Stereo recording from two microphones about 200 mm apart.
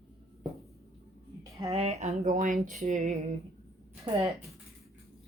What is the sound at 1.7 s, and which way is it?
Speech, 30° right (ahead or behind).